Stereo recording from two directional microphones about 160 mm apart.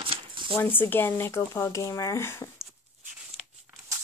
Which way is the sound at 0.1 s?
30° right (ahead or behind).